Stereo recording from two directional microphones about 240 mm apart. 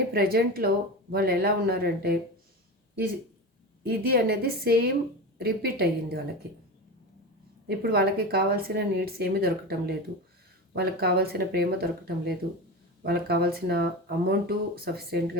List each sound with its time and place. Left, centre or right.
0.1 s speech: right
3.8 s speech: right
7.7 s speech: right